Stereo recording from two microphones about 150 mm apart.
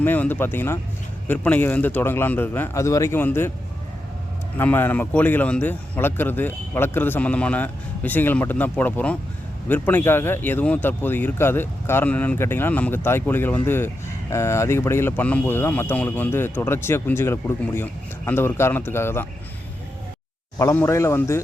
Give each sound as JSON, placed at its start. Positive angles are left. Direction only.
{"t": 0.0, "sound": "speech", "side_deg": 10}
{"t": 4.5, "sound": "speech", "side_deg": 15}
{"t": 20.6, "sound": "speech", "side_deg": 15}